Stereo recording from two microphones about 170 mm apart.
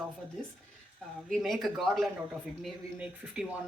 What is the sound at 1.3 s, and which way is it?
Speech, centre (ahead or behind).